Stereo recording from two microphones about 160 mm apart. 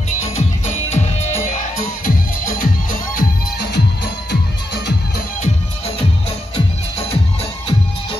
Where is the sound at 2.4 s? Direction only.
60° left (ahead or behind); by 4.4 s 90° left.